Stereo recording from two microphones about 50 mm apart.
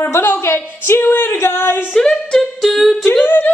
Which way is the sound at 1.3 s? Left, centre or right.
Left.